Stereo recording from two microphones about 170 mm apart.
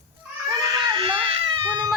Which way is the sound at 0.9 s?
30° right (ahead or behind).